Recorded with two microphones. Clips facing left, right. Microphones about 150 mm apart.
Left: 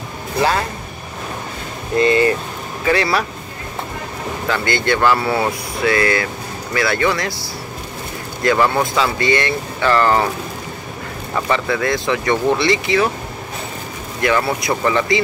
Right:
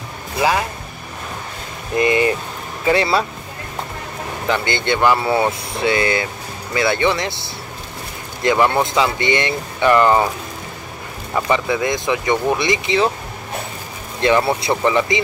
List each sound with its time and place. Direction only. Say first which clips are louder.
0.4 s speech: even; 10° right (ahead or behind)
2.0 s speech: left 2 dB; 15° right (ahead or behind)
4.5 s speech: left 1 dB; 20° right (ahead or behind)
11.3 s speech: right 1 dB; 15° right (ahead or behind)
14.2 s speech: right 2 dB; 25° right (ahead or behind)